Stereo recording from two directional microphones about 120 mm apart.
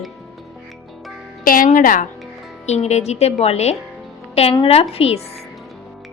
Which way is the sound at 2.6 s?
65° left (ahead or behind).